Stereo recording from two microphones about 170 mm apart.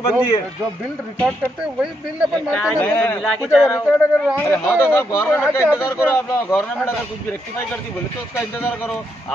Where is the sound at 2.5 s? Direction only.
10° left (ahead or behind).